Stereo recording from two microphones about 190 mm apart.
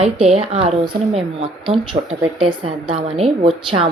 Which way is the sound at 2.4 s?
30° right (ahead or behind).